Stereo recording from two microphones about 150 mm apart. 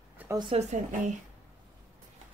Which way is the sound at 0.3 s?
30° right (ahead or behind).